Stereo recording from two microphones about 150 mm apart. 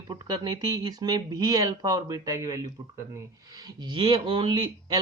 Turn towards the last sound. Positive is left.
turn(degrees=-30)  # may be behind; listen again after turning